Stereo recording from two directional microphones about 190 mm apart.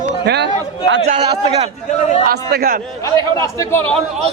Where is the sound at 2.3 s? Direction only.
55° right (ahead or behind).